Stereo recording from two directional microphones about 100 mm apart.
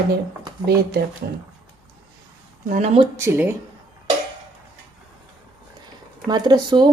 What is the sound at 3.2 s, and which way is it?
Speech, 25° right (ahead or behind).